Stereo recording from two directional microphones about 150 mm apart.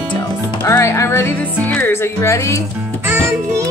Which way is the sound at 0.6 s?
20° left (ahead or behind).